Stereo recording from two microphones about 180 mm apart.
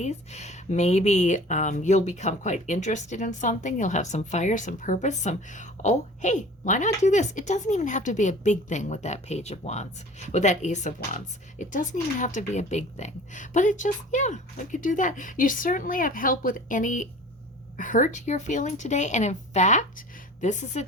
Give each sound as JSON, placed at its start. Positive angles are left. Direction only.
{"t": 0.0, "sound": "speech", "side_deg": 40}